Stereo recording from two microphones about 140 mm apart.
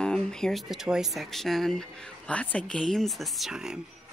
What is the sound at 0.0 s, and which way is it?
Speech, 5° left (ahead or behind).